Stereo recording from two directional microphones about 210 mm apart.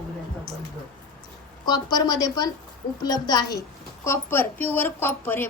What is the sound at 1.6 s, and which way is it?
A woman's voice, 20° left (ahead or behind).